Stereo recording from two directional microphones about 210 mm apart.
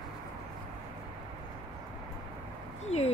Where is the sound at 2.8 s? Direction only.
30° left (ahead or behind).